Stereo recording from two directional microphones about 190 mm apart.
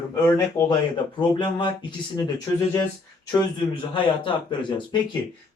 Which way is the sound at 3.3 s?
25° left (ahead or behind).